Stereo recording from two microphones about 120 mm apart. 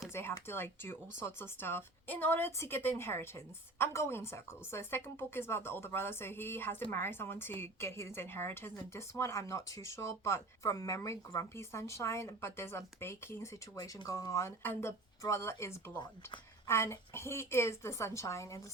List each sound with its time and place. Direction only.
0.1 s a woman's voice: 20° left (ahead or behind)